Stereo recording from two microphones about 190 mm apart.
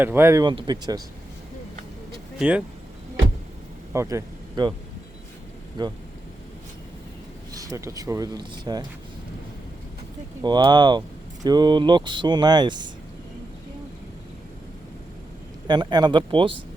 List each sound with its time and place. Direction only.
0.0 s speech: 10° right (ahead or behind)
2.4 s speech: 5° right (ahead or behind)
3.9 s speech: 15° right (ahead or behind)
5.8 s speech: 25° right (ahead or behind)
7.5 s speech: 20° right (ahead or behind)
10.4 s speech: 25° right (ahead or behind)
15.6 s speech: 25° right (ahead or behind)